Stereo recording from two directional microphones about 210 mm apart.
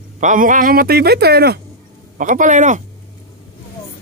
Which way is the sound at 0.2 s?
35° right (ahead or behind).